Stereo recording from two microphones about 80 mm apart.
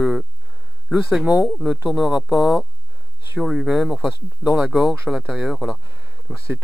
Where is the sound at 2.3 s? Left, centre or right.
Centre.